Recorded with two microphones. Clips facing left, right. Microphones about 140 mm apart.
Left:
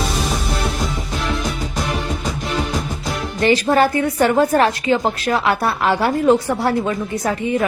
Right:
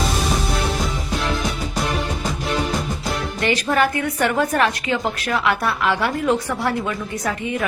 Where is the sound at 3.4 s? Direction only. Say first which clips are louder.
Left 5 dB; 30° left (ahead or behind).